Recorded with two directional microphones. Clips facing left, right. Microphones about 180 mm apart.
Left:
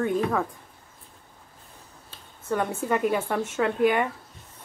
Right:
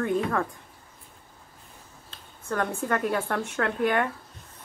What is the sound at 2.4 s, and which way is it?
Speech, 5° left (ahead or behind).